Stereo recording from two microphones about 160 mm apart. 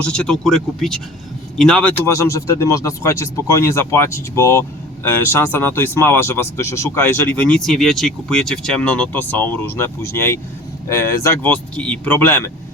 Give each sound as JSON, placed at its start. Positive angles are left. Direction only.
{"t": 0.0, "sound": "speech", "side_deg": 5}
{"t": 2.0, "sound": "speech", "side_deg": 20}